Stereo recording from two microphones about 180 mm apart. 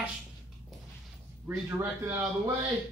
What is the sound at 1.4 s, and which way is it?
Speech, 15° right (ahead or behind).